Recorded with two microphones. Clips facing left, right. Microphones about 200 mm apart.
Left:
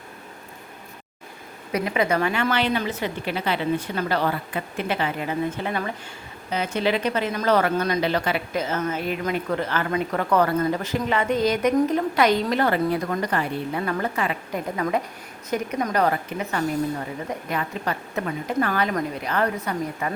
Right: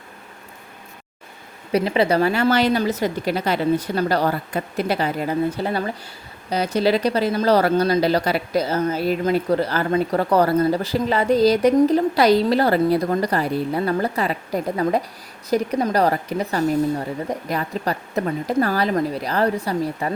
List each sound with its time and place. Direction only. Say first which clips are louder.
1.7 s speech: right 5 dB; 30° right (ahead or behind)